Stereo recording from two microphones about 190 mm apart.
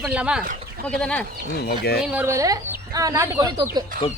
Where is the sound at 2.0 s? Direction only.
5° right (ahead or behind).